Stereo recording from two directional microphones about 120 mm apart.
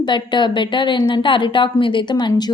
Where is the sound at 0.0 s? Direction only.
40° left (ahead or behind).